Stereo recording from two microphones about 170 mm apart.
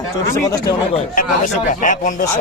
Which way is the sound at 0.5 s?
20° left (ahead or behind).